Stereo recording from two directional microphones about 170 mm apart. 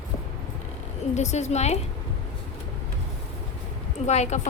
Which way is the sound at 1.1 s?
40° left (ahead or behind).